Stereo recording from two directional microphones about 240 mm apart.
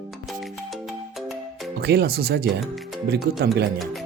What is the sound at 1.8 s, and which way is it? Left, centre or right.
Speech, right.